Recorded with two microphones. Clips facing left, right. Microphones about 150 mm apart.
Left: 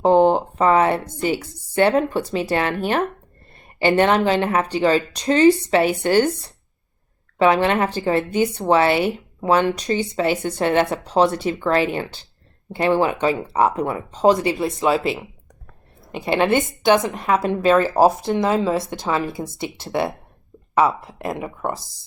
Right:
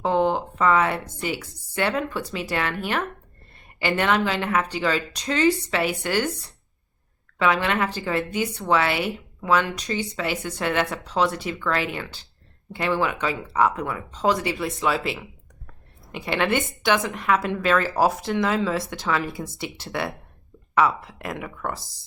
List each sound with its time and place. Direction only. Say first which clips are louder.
0.0 s a woman's voice: left 7 dB; 30° left (ahead or behind)
7.3 s a woman's voice: left 6 dB; 30° left (ahead or behind)
16.5 s a woman's voice: left 6 dB; 45° left (ahead or behind); by 21.8 s 25° left (ahead or behind)